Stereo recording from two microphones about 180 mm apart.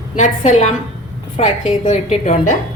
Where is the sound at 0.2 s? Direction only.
40° left (ahead or behind).